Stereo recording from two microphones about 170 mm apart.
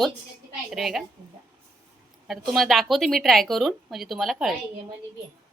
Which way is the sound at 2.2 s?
Centre (ahead or behind).